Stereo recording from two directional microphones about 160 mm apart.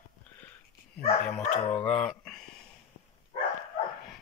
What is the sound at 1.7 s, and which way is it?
Speech, 5° left (ahead or behind).